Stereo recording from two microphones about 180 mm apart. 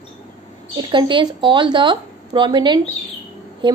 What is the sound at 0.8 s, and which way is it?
A woman's voice, 25° right (ahead or behind).